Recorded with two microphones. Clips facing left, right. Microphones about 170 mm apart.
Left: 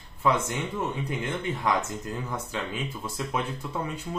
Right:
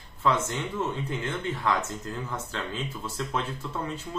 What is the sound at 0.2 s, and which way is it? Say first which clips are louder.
Speech: left 1 dB; 15° left (ahead or behind).